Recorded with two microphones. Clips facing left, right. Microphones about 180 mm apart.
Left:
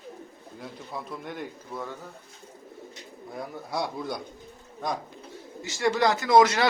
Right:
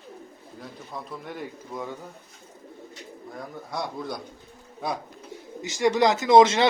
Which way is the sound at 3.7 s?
Centre (ahead or behind).